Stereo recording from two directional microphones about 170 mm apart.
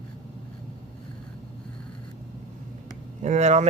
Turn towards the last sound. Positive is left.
turn(degrees=-40)  # may be behind; listen again after turning